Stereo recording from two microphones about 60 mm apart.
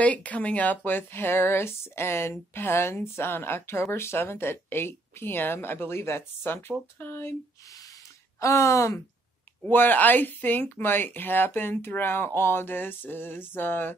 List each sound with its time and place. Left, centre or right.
0.0 s speech: left
8.4 s speech: left
9.7 s speech: left